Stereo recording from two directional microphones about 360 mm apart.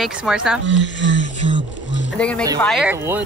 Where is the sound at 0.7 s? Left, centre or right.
Left.